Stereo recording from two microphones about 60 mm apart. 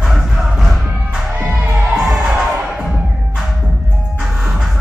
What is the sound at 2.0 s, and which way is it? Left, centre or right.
Crowd, centre.